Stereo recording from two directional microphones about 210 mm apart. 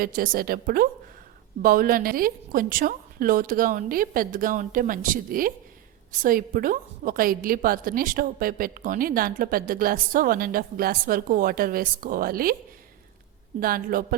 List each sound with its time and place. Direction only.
0.0 s a woman's voice: 45° right (ahead or behind)
13.6 s a woman's voice: 45° right (ahead or behind)